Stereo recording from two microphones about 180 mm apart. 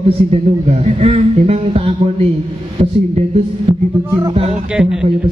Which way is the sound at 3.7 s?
25° right (ahead or behind).